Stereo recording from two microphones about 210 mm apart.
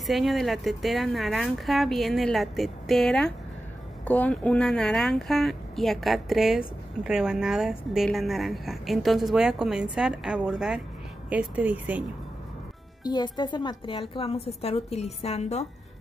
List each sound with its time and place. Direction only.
0.0 s speech: centre (ahead or behind)
13.0 s a woman's voice: 20° left (ahead or behind)